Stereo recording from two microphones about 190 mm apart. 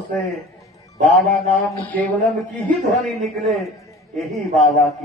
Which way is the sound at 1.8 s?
10° left (ahead or behind).